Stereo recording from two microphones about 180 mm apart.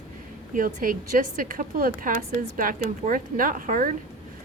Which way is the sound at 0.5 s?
50° right (ahead or behind).